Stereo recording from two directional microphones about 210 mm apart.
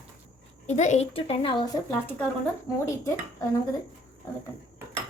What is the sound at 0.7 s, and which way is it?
A woman's voice, 30° left (ahead or behind).